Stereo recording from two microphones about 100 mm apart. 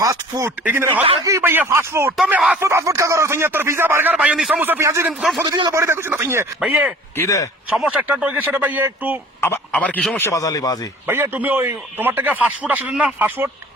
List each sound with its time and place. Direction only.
0.0 s speech: 35° right (ahead or behind)
0.6 s a man's voice: 20° right (ahead or behind)
1.2 s a man's voice: 30° right (ahead or behind)
2.3 s a man's voice: 10° right (ahead or behind)
2.6 s a man's voice: 25° right (ahead or behind)
5.5 s a man's voice: 50° right (ahead or behind)
5.7 s a man's voice: 25° right (ahead or behind)
7.2 s speech: 35° left (ahead or behind)
7.8 s a man's voice: 15° right (ahead or behind)
9.7 s speech: 15° left (ahead or behind)
10.2 s speech: 35° left (ahead or behind)
11.0 s a man's voice: 20° right (ahead or behind)